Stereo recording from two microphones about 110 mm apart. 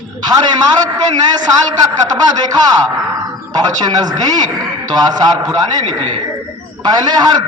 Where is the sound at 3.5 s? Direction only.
40° right (ahead or behind).